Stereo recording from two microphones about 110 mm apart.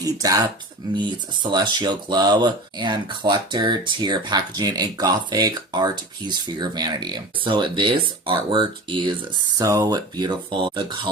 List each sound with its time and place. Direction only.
0.0 s speech: 30° right (ahead or behind)
0.9 s speech: 45° right (ahead or behind)